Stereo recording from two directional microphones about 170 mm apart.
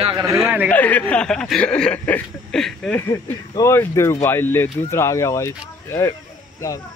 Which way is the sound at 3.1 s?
20° left (ahead or behind).